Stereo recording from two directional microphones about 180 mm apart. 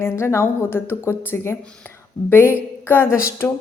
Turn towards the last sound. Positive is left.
turn(degrees=15)  # may be behind; listen again after turning